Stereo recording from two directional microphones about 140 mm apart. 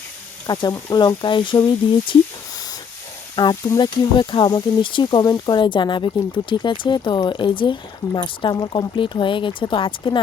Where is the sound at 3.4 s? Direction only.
30° left (ahead or behind).